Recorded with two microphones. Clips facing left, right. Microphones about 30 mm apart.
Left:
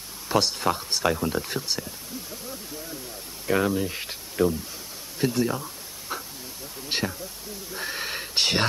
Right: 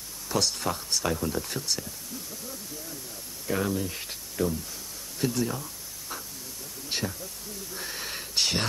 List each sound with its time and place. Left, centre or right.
0.3 s speech: left
3.4 s speech: left
5.2 s a sound: left
6.9 s speech: left